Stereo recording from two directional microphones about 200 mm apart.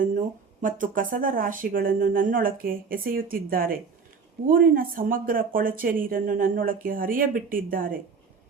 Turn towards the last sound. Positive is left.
turn(degrees=-45)  # may be behind; listen again after turning